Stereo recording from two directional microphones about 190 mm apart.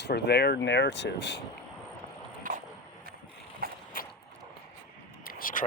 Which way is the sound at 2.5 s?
45° right (ahead or behind).